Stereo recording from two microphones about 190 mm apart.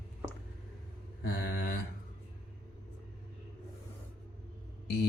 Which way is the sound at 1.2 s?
55° left (ahead or behind).